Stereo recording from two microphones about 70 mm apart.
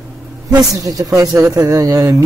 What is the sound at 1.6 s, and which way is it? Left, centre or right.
Speech, right.